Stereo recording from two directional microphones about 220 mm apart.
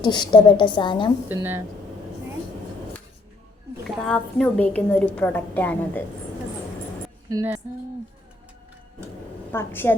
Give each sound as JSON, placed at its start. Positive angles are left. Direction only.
{"t": 0.0, "sound": "a woman's voice", "side_deg": 20}
{"t": 1.3, "sound": "speech", "side_deg": -10}
{"t": 3.8, "sound": "a woman's voice", "side_deg": 0}
{"t": 7.3, "sound": "speech", "side_deg": -10}
{"t": 9.5, "sound": "a woman's voice", "side_deg": 10}